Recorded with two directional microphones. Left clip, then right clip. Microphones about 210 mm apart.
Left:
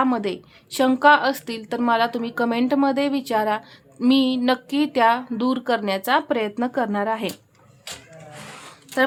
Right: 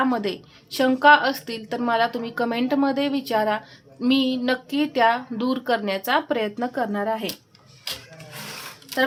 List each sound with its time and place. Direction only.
0.0 s a woman's voice: 15° left (ahead or behind)